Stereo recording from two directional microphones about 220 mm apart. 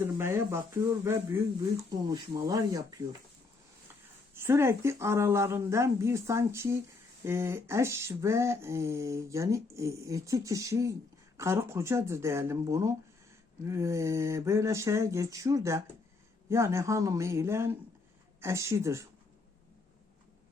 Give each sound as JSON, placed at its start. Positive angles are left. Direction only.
{"t": 0.0, "sound": "speech", "side_deg": -10}
{"t": 4.4, "sound": "speech", "side_deg": -10}